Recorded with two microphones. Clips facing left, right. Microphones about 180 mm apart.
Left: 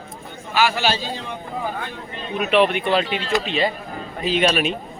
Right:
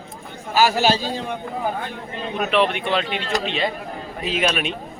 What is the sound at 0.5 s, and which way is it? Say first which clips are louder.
Speech: right 3 dB; 40° right (ahead or behind).